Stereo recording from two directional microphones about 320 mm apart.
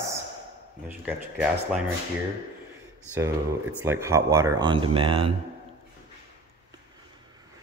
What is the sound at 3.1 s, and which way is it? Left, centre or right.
Speech, centre.